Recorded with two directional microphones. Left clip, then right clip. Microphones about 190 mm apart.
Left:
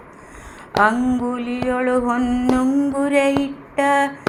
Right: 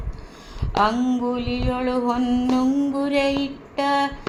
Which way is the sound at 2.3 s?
40° left (ahead or behind).